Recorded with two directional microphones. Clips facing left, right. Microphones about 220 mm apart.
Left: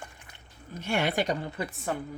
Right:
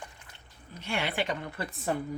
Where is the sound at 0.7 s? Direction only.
45° left (ahead or behind).